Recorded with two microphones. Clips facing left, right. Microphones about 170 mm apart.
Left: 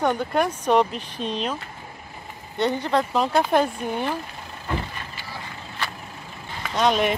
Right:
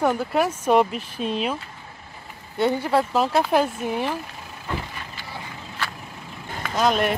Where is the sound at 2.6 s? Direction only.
5° right (ahead or behind).